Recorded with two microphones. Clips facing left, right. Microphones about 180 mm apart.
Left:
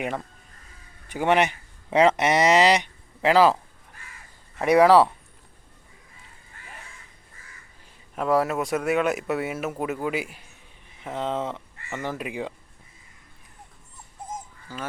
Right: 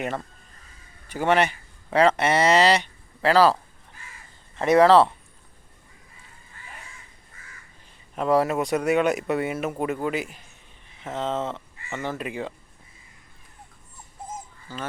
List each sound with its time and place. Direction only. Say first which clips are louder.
1.0 s speech: even; 15° left (ahead or behind)
8.1 s speech: right 1 dB; centre (ahead or behind)
14.7 s speech: right 1 dB; 10° left (ahead or behind)